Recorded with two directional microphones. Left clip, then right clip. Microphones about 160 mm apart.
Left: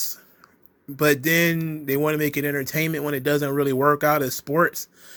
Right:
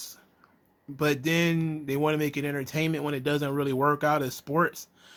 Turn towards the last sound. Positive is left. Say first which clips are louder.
# left 6 dB
turn(degrees=10)  # may be behind; listen again after turning